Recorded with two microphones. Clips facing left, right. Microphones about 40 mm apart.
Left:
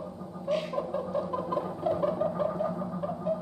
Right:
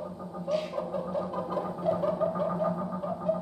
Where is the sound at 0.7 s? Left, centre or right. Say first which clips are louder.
Left 1 dB; centre.